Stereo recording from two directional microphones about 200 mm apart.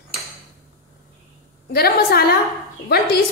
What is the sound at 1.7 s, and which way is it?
Speech, 50° left (ahead or behind).